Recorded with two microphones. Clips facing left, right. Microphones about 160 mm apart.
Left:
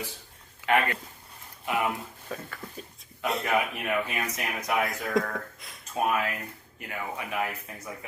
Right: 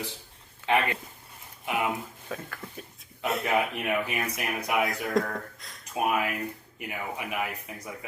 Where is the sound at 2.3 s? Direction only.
Centre (ahead or behind).